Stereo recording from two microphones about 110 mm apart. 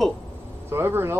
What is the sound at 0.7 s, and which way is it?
Speech, 20° right (ahead or behind).